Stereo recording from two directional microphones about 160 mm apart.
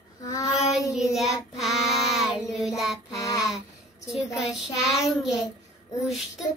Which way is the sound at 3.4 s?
5° right (ahead or behind).